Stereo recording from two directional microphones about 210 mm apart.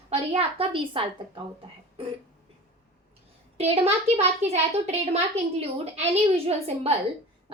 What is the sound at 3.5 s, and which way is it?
A child's voice, 30° right (ahead or behind).